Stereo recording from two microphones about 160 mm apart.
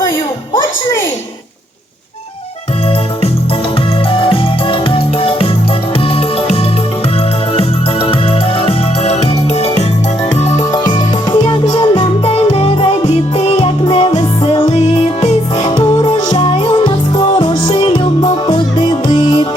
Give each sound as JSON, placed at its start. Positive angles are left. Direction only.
{"t": 4.1, "sound": "music", "side_deg": 35}
{"t": 11.3, "sound": "music", "side_deg": 30}